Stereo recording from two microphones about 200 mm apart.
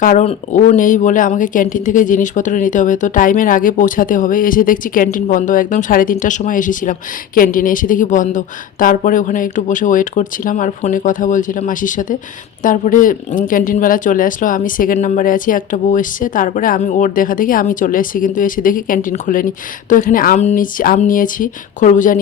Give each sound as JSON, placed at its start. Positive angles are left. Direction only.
{"t": 0.0, "sound": "speech", "side_deg": 45}